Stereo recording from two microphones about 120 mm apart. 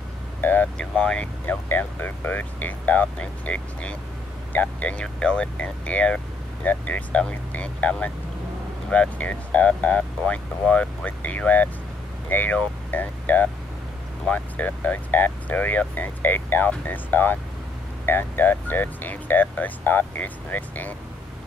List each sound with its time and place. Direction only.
0.4 s speech: 15° left (ahead or behind)